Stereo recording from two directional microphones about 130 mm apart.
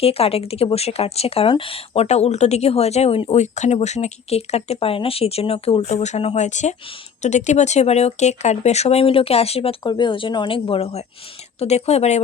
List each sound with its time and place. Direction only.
0.0 s speech: 50° left (ahead or behind)